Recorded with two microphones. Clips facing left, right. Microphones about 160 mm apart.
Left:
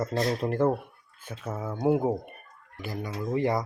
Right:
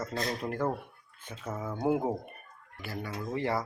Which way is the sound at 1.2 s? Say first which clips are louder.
Left 3 dB; 10° left (ahead or behind).